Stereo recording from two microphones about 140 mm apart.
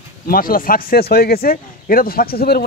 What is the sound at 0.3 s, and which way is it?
Speech, 90° left.